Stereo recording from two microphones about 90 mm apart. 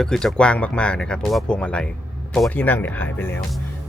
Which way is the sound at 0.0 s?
5° left (ahead or behind).